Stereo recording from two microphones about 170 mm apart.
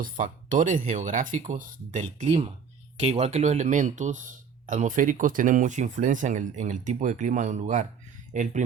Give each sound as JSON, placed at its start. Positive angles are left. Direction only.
{"t": 0.0, "sound": "speech", "side_deg": -50}